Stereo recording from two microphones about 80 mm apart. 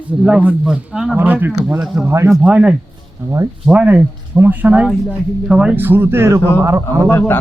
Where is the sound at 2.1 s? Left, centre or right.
Right.